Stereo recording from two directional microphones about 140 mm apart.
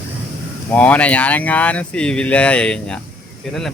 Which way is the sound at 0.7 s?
10° left (ahead or behind).